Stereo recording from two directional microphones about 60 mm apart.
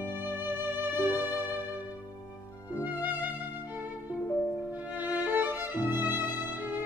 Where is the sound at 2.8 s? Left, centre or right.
Right.